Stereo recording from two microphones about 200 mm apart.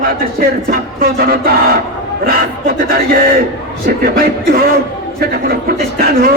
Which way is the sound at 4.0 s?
50° right (ahead or behind).